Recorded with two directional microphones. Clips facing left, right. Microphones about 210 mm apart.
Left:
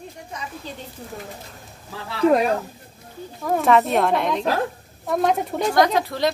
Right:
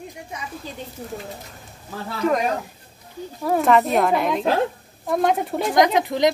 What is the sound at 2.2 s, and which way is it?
Speech, 30° left (ahead or behind).